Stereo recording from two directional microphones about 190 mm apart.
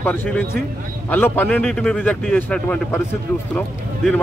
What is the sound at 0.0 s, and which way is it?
Speech, 10° left (ahead or behind).